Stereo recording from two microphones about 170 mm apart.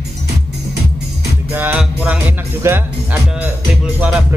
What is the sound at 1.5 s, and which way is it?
Speech, 10° right (ahead or behind).